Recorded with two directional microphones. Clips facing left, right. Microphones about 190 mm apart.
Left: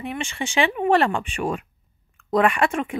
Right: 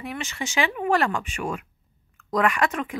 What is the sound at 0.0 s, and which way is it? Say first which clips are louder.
Speech: left 3 dB; 25° left (ahead or behind).